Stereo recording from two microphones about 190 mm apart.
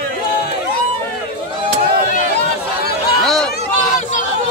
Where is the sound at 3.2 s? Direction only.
Centre (ahead or behind).